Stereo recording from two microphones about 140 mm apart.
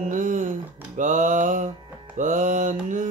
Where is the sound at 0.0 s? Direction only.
65° right (ahead or behind).